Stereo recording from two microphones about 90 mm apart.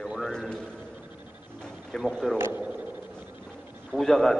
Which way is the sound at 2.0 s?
Centre (ahead or behind).